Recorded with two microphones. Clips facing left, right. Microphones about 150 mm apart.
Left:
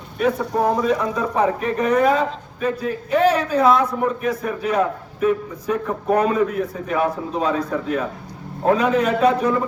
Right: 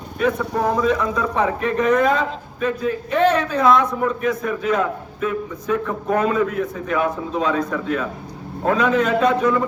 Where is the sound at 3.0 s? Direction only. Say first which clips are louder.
Left 1 dB; 10° left (ahead or behind).